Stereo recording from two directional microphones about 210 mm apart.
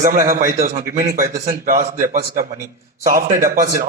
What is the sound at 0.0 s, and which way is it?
A man's voice, 40° right (ahead or behind).